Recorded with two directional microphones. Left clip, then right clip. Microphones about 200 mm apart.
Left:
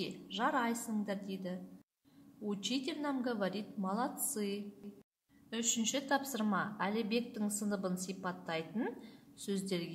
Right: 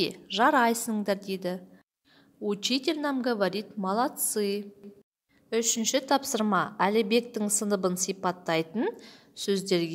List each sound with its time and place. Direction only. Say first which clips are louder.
0.0 s a woman's voice: right 12 dB; 50° right (ahead or behind)